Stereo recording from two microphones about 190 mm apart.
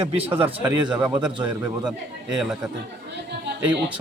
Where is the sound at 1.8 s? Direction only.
5° right (ahead or behind).